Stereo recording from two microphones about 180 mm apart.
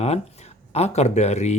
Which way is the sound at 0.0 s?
35° left (ahead or behind).